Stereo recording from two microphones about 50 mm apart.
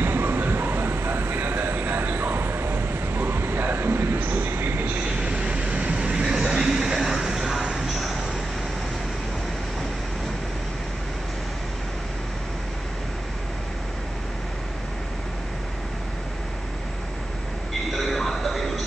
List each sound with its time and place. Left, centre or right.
0.0 s train: right
5.2 s vehicle: right; by 8.2 s centre
17.9 s music: centre